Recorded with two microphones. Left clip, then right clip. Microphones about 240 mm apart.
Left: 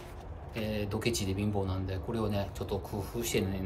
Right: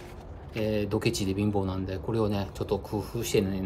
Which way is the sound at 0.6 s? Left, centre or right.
Centre.